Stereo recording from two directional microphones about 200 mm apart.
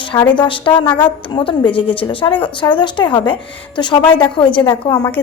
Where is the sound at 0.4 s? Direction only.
25° left (ahead or behind).